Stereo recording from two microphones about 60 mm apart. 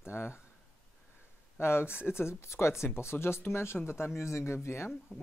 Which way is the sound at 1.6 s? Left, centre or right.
Left.